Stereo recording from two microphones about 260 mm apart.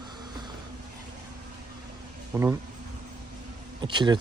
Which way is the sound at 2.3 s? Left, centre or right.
Centre.